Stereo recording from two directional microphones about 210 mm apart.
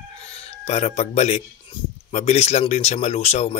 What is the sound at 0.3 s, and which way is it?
Speech, 30° left (ahead or behind).